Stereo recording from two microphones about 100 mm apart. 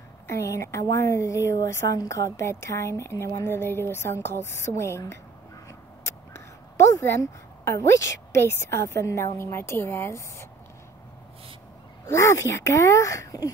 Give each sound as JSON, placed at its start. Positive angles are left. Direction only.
{"t": 0.3, "sound": "a woman's voice", "side_deg": 30}
{"t": 6.8, "sound": "a woman's voice", "side_deg": 30}
{"t": 12.1, "sound": "speech", "side_deg": 30}